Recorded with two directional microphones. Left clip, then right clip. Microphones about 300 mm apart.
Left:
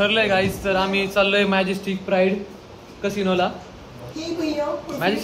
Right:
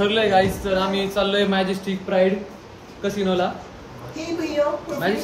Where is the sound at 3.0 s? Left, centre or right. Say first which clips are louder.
Left 1 dB; centre.